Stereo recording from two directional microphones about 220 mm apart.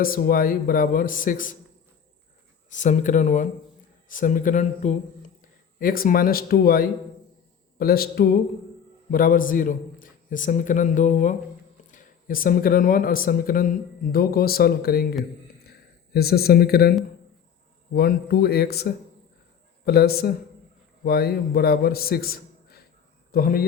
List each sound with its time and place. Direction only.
0.0 s speech: 40° left (ahead or behind)
2.6 s a man's voice: 35° left (ahead or behind)
16.1 s speech: 45° left (ahead or behind)
17.9 s a man's voice: 45° left (ahead or behind)